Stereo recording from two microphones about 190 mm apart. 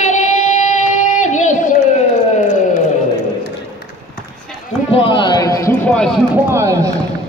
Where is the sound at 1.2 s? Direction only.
40° left (ahead or behind).